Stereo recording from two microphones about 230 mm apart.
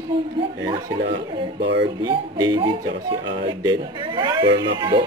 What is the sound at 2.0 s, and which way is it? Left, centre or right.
Speech, centre.